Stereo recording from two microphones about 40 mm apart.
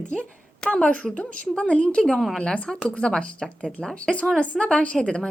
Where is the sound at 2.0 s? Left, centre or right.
Centre.